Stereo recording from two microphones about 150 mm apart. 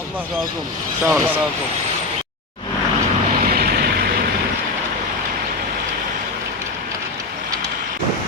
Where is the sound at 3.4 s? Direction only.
90° right.